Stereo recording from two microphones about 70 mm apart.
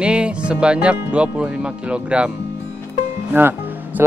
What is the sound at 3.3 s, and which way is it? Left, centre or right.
Speech, right.